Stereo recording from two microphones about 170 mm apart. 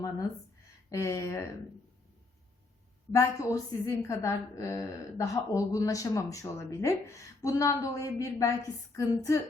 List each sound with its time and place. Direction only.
0.9 s speech: 15° left (ahead or behind)
3.1 s a woman's voice: 20° left (ahead or behind)